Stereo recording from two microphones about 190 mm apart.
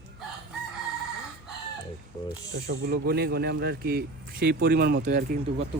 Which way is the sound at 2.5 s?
60° right (ahead or behind).